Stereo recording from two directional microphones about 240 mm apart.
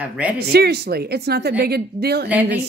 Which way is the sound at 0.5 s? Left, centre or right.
Right.